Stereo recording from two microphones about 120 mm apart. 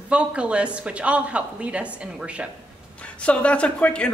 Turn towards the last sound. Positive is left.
turn(degrees=10)  # may be behind; listen again after turning